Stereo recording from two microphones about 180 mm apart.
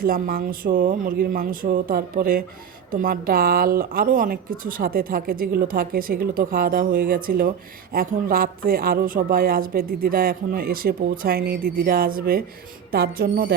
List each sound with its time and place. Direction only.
0.0 s a woman's voice: 55° right (ahead or behind)